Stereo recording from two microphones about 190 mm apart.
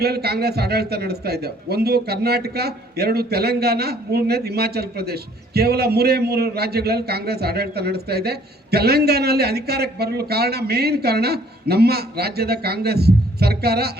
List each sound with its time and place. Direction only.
0.0 s a man's voice: 55° right (ahead or behind)